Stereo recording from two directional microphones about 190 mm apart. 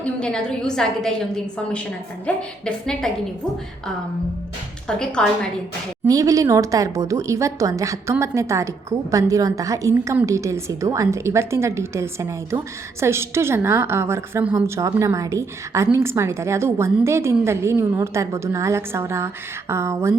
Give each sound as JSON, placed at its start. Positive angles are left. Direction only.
{"t": 0.0, "sound": "a woman's voice", "side_deg": 5}
{"t": 4.9, "sound": "a woman's voice", "side_deg": 5}
{"t": 6.1, "sound": "a woman's voice", "side_deg": -20}